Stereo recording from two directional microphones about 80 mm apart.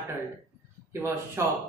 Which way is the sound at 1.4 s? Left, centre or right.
Right.